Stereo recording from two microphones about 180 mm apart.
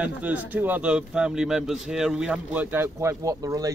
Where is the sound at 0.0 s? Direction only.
10° right (ahead or behind).